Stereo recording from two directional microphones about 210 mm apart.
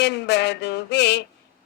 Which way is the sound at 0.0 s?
55° left (ahead or behind).